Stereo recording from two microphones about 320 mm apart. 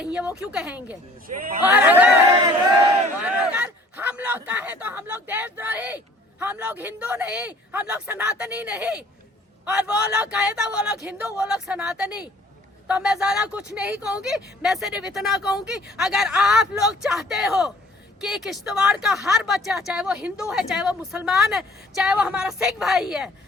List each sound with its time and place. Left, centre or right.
0.0 s speech: centre
3.2 s a man's voice: centre